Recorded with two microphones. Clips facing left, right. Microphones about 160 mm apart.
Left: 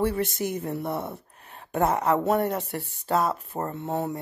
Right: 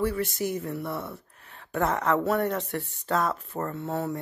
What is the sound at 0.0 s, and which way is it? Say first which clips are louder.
Speech: left 2 dB; 25° left (ahead or behind).